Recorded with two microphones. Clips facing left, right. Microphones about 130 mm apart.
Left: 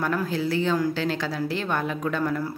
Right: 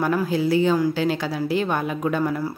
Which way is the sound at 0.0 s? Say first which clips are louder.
Right 4 dB; 10° right (ahead or behind).